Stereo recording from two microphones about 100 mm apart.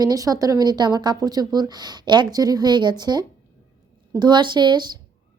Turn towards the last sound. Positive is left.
turn(degrees=-45)  # may be behind; listen again after turning